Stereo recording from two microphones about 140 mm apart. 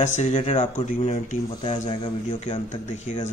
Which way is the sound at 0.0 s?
60° left (ahead or behind).